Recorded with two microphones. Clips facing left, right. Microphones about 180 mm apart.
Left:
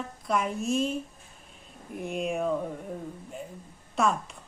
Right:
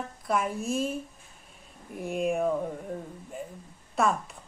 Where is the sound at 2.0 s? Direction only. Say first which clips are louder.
Right 2 dB; centre (ahead or behind).